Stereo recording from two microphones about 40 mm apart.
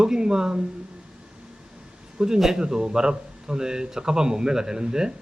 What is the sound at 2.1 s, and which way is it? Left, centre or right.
Speech, centre.